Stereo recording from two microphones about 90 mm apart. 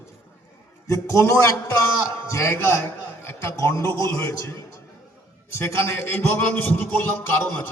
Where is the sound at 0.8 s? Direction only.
35° left (ahead or behind).